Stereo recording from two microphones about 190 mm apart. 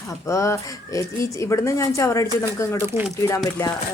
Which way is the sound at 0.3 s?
15° left (ahead or behind).